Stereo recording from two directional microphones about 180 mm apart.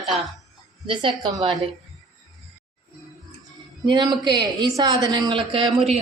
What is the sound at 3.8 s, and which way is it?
A woman's voice, 25° right (ahead or behind).